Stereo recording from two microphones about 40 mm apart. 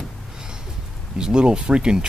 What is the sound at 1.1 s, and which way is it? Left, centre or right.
Speech, right.